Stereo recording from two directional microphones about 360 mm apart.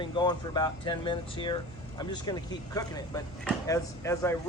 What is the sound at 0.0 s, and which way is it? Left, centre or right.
Speech, centre.